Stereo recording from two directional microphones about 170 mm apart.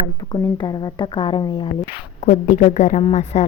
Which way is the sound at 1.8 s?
40° left (ahead or behind).